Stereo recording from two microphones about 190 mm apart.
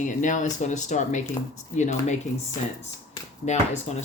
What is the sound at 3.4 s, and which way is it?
Speech, 35° left (ahead or behind).